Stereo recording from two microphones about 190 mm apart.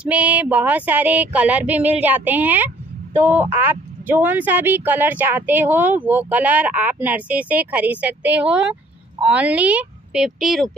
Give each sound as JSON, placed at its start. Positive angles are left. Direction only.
{"t": 0.0, "sound": "speech", "side_deg": -5}